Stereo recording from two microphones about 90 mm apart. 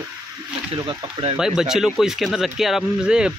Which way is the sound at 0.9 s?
75° right (ahead or behind).